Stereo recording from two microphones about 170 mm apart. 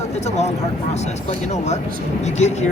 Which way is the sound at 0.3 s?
40° left (ahead or behind).